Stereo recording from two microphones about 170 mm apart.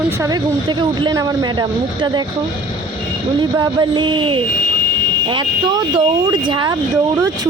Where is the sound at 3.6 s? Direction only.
25° right (ahead or behind).